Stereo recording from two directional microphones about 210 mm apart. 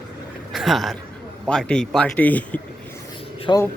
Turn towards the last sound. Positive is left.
turn(degrees=20)  # may be behind; listen again after turning